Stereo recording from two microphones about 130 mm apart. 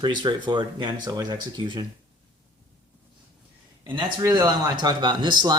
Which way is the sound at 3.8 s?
35° right (ahead or behind).